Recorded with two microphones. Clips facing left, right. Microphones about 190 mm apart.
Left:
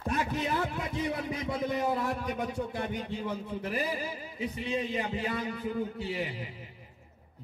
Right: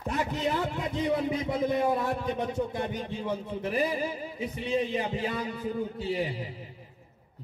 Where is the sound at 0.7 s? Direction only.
25° right (ahead or behind).